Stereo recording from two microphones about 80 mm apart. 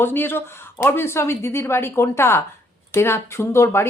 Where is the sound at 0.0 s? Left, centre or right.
Left.